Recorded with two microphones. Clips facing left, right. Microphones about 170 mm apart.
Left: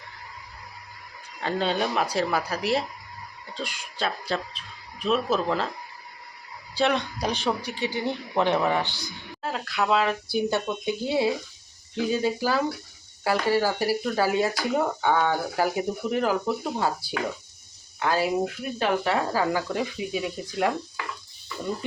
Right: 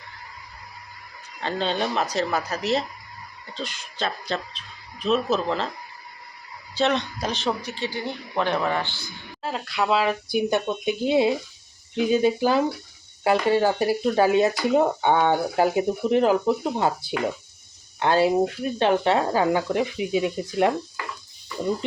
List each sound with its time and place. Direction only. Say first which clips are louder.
1.4 s speech: even; 5° left (ahead or behind)
6.7 s speech: right 1 dB; 10° left (ahead or behind)
9.4 s speech: right 1 dB; centre (ahead or behind)
10.3 s speech: right 3 dB; 20° right (ahead or behind)